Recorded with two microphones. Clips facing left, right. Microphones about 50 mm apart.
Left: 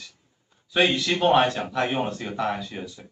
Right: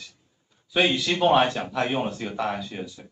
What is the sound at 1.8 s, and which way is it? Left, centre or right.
Speech, left.